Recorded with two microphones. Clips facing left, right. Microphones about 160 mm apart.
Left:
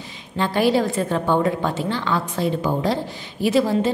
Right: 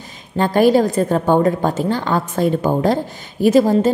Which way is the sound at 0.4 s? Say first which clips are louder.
Right 6 dB; 45° right (ahead or behind).